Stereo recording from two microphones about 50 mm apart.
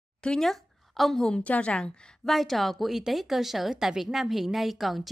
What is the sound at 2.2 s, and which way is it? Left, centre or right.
A woman's voice, centre.